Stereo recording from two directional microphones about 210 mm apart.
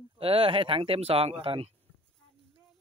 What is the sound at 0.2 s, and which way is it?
Speech, 25° right (ahead or behind).